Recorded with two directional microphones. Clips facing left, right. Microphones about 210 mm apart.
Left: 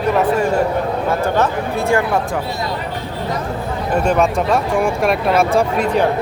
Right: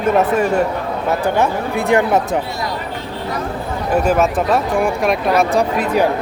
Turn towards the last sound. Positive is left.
turn(degrees=0)  # may be behind; listen again after turning